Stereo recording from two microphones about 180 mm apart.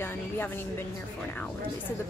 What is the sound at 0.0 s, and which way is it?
Music, 10° left (ahead or behind).